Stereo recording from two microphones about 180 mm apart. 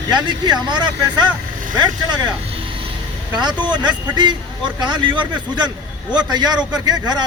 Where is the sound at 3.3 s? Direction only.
25° right (ahead or behind).